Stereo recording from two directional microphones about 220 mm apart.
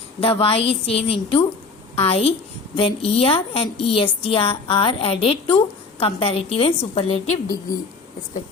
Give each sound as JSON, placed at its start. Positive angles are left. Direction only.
{"t": 0.2, "sound": "a woman's voice", "side_deg": 25}